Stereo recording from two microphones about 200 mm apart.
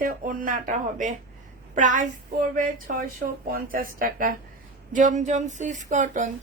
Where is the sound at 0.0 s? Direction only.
45° right (ahead or behind).